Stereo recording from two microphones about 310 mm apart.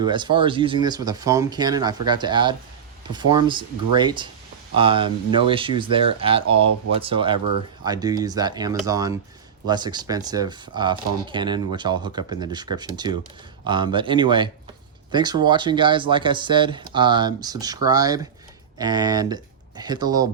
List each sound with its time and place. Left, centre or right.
0.0 s speech: centre